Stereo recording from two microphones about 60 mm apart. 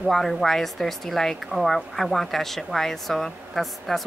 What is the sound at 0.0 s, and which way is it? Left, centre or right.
Speech, centre.